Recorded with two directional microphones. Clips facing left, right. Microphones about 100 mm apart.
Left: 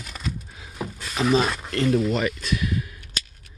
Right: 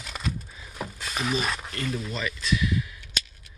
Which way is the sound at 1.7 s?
75° left (ahead or behind).